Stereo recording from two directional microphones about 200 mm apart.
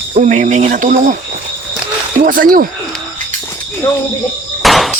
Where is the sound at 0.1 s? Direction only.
35° right (ahead or behind).